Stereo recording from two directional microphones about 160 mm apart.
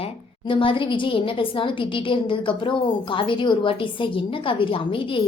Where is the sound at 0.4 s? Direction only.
30° left (ahead or behind).